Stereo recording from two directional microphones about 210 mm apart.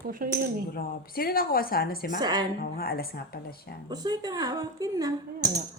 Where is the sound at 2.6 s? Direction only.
45° left (ahead or behind).